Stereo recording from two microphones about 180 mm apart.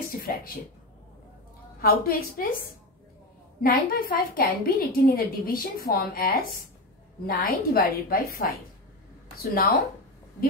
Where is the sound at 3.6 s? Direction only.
55° left (ahead or behind).